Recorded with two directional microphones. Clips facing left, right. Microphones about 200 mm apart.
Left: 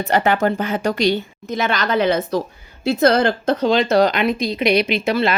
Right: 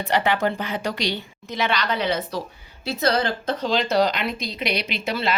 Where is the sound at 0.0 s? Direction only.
45° left (ahead or behind).